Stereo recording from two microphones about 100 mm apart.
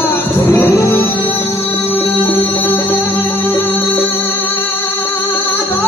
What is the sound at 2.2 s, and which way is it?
Music, 20° left (ahead or behind).